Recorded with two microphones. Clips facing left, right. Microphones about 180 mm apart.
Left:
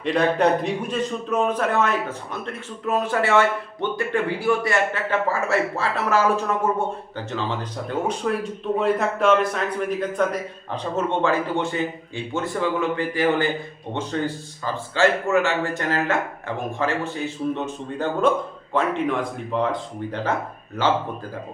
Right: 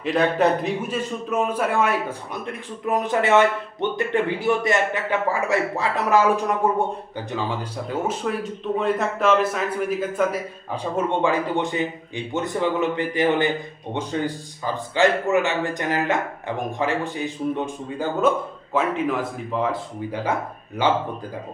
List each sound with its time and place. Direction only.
0.0 s a man's voice: centre (ahead or behind)
7.9 s a man's voice: 5° right (ahead or behind)